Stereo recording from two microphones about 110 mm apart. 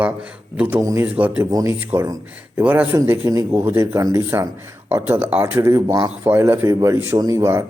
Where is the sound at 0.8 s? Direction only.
30° right (ahead or behind).